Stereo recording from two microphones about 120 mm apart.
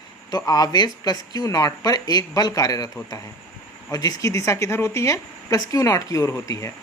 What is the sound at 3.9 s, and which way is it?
Speech, 30° left (ahead or behind).